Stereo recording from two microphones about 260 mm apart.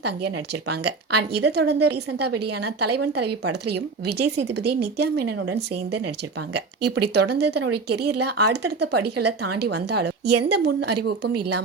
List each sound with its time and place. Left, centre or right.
1.3 s speech: right
2.3 s a woman's voice: right
2.9 s speech: right
7.9 s a woman's voice: right
8.1 s speech: right
10.2 s a woman's voice: right
10.6 s speech: right